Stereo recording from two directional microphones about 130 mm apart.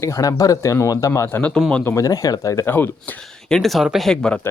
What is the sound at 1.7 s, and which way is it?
Speech, 20° left (ahead or behind).